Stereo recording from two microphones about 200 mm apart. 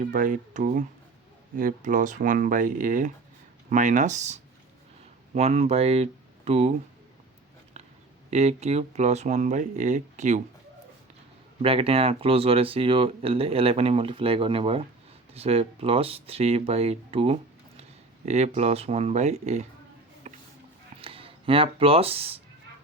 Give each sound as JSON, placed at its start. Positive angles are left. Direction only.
{"t": 0.0, "sound": "speech", "side_deg": -40}
{"t": 8.3, "sound": "speech", "side_deg": -35}
{"t": 11.6, "sound": "speech", "side_deg": -30}
{"t": 20.2, "sound": "music", "side_deg": -35}
{"t": 21.0, "sound": "speech", "side_deg": -25}